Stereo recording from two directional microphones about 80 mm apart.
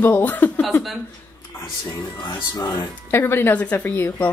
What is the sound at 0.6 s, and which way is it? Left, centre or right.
Speech, centre.